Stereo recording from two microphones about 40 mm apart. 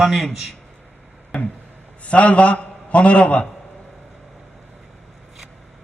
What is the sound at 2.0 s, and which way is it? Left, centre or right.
A man's voice, left.